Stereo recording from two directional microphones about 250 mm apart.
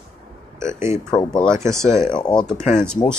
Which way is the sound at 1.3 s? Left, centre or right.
Centre.